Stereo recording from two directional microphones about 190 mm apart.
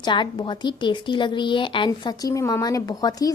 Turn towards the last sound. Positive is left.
turn(degrees=20)  # may be behind; listen again after turning